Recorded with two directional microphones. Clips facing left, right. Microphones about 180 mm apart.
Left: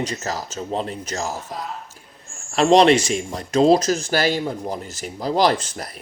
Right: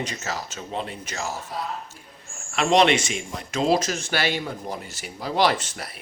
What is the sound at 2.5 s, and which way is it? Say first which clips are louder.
Speech: left 5 dB; 35° left (ahead or behind).